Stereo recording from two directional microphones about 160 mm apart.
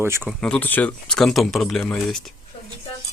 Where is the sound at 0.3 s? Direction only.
5° left (ahead or behind).